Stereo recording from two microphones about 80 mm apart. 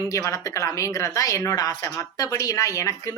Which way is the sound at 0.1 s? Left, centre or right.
Left.